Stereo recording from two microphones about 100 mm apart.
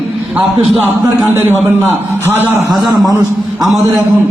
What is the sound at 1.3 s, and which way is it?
A man's voice, 20° right (ahead or behind).